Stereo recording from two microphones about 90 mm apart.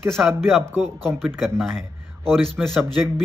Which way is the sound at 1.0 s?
5° left (ahead or behind).